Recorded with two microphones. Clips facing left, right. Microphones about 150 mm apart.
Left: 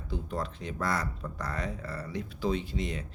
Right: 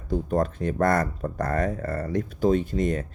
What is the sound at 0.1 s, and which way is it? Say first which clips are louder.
Speech: right 11 dB; 45° right (ahead or behind).